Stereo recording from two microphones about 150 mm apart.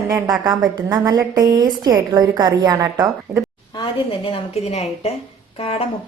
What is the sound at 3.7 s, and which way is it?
A woman's voice, 35° left (ahead or behind).